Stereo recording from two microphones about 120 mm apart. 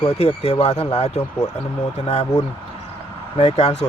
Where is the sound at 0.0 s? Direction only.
55° left (ahead or behind).